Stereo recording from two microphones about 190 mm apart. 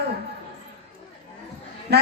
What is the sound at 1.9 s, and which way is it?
Speech, 60° right (ahead or behind).